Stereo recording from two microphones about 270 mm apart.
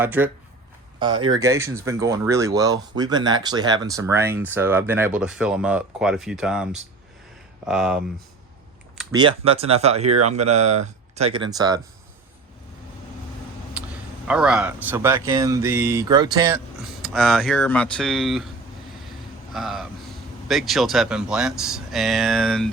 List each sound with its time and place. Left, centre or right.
0.0 s speech: centre
0.9 s speech: centre
7.7 s speech: centre
9.1 s speech: centre
13.8 s vehicle: centre
14.3 s speech: centre
17.0 s speech: centre
19.5 s speech: centre